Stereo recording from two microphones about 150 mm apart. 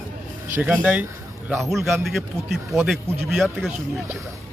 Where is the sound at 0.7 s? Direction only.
Centre (ahead or behind).